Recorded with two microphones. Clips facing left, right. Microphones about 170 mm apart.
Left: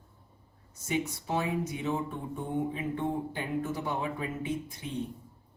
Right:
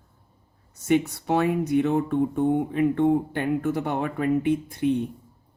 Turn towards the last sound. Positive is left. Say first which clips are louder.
# right 11 dB
turn(degrees=-60)  # may be behind; listen again after turning